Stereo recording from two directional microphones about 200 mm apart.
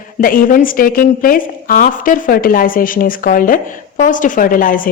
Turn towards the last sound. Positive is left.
turn(degrees=45)  # may be behind; listen again after turning